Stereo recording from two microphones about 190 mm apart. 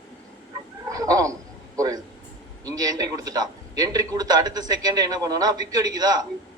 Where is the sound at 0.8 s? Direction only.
15° right (ahead or behind).